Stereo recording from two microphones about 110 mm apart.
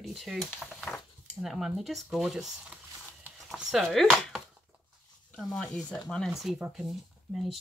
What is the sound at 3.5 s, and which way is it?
Chopping, 5° right (ahead or behind).